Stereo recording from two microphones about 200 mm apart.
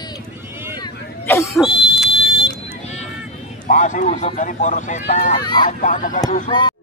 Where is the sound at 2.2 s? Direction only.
25° left (ahead or behind).